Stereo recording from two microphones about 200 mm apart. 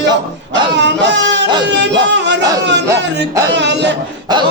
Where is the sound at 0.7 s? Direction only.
60° right (ahead or behind).